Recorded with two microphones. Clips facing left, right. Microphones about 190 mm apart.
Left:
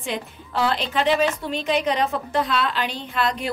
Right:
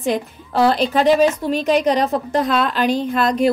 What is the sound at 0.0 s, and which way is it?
A woman's voice, 40° right (ahead or behind).